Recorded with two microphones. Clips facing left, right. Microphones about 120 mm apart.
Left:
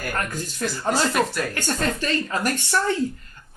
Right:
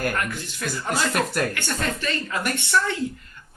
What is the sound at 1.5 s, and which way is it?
Speech, 40° left (ahead or behind).